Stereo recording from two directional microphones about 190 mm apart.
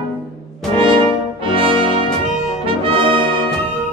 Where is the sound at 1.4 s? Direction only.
30° right (ahead or behind).